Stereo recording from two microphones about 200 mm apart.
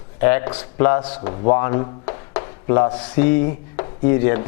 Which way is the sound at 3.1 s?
15° left (ahead or behind).